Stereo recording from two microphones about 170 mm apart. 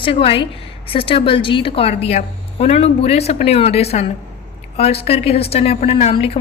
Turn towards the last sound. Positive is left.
turn(degrees=35)  # may be behind; listen again after turning